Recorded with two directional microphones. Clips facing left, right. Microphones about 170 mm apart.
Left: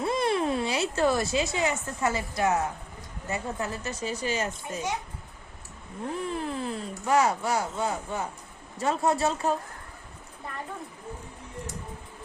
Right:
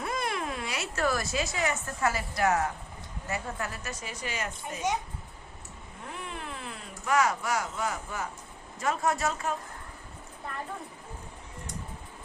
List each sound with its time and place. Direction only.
0.0 s a sound: 30° left (ahead or behind)
1.5 s speech: 20° left (ahead or behind)
6.1 s speech: 35° left (ahead or behind)